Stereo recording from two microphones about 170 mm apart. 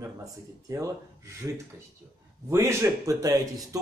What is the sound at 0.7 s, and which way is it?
A man's voice, 20° right (ahead or behind).